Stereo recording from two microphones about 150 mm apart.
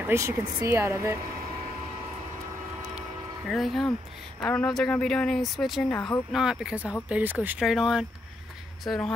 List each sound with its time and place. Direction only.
0.0 s speech: 20° right (ahead or behind)
3.4 s speech: centre (ahead or behind)
5.9 s speech: 15° left (ahead or behind)
6.3 s speech: 5° right (ahead or behind)